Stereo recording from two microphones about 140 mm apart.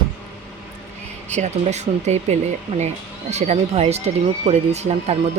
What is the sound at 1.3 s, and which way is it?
Speech, 55° right (ahead or behind).